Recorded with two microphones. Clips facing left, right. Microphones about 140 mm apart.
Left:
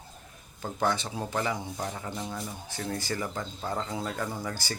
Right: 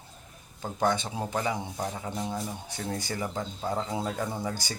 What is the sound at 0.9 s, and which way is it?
Speech, 20° right (ahead or behind).